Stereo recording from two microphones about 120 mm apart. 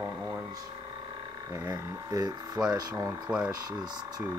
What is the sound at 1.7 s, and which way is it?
Speech, 35° right (ahead or behind).